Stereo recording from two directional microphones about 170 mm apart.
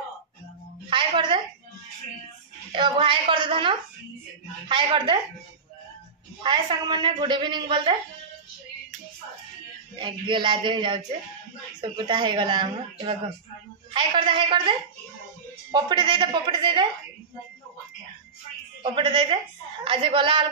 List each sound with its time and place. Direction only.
0.8 s a woman's voice: 30° right (ahead or behind)
2.7 s a man's voice: 30° right (ahead or behind)
6.4 s a man's voice: 25° right (ahead or behind)
9.9 s a man's voice: 30° right (ahead or behind)
18.8 s a man's voice: 30° right (ahead or behind)